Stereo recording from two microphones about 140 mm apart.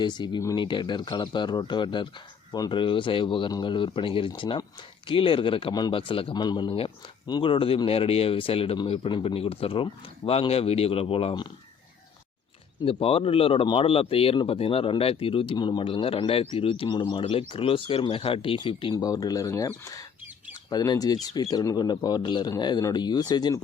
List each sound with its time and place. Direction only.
0.0 s speech: 30° left (ahead or behind)
12.8 s speech: 40° left (ahead or behind)